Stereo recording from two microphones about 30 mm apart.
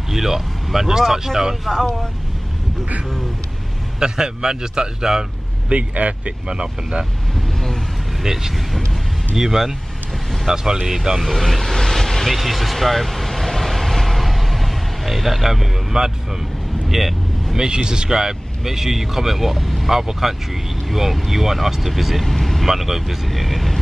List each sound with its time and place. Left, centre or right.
0.1 s speech: centre
4.0 s speech: right
5.7 s speech: right
6.4 s speech: right
8.2 s speech: centre
11.1 s speech: centre
11.7 s vehicle: centre
12.3 s vehicle: centre
16.0 s speech: right
16.9 s vehicle: centre
17.6 s speech: right; by 22.2 s centre
22.2 s speech: centre
22.7 s speech: centre
23.3 s speech: centre